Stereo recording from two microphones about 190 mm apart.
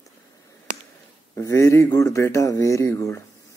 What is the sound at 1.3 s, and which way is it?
Speech, 15° left (ahead or behind).